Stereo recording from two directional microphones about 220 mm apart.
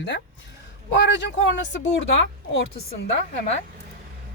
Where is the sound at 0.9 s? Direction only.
55° left (ahead or behind).